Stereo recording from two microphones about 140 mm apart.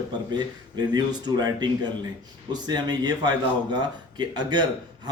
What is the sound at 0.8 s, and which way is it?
A man's voice, 30° right (ahead or behind).